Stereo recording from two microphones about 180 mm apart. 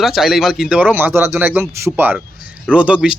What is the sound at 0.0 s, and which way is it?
Speech, centre (ahead or behind).